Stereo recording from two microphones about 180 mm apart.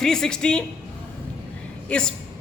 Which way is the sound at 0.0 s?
5° left (ahead or behind).